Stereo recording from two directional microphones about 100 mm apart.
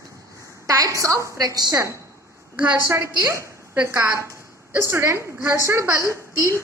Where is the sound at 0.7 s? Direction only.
35° right (ahead or behind).